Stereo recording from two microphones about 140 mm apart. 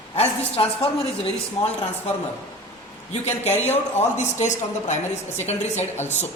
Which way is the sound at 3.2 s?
50° left (ahead or behind).